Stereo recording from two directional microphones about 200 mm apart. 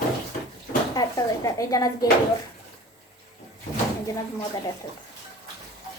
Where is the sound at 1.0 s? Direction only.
15° left (ahead or behind).